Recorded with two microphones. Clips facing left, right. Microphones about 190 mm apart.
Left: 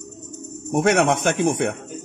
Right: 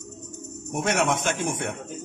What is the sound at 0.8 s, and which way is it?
Speech, 65° left (ahead or behind).